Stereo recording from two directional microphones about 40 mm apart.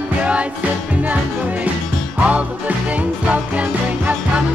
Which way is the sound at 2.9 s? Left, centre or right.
Right.